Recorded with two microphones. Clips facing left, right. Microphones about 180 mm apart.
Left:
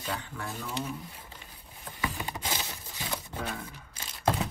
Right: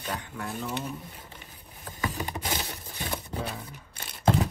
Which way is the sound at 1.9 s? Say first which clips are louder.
Right 2 dB; 40° right (ahead or behind).